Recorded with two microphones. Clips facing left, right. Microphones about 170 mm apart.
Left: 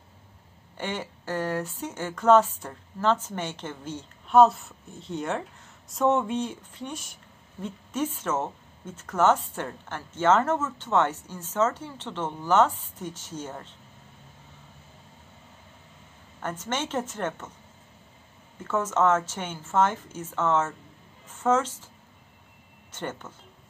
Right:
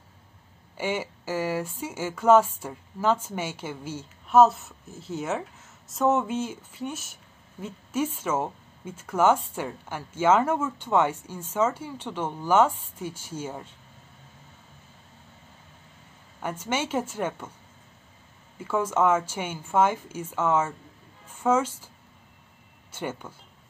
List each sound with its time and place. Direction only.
0.7 s speech: 10° right (ahead or behind)
16.3 s speech: 10° right (ahead or behind)
18.6 s speech: 10° right (ahead or behind)